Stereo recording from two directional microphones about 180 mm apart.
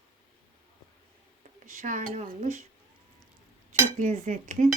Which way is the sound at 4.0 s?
40° right (ahead or behind).